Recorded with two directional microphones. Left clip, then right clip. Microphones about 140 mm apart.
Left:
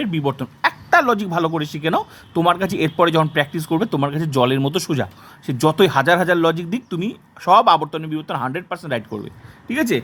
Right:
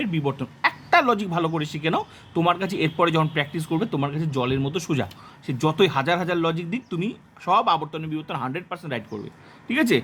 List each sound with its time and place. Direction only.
0.0 s speech: 30° left (ahead or behind)
5.5 s speech: 30° left (ahead or behind)
9.6 s speech: 10° left (ahead or behind)